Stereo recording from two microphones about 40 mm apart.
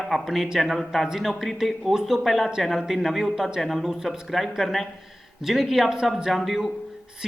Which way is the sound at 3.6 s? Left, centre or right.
Centre.